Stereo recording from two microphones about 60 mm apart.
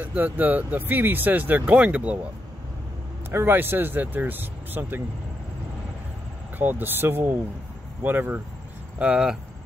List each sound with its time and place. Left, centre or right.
0.0 s speech: right
3.3 s speech: right
6.6 s speech: right
8.9 s speech: centre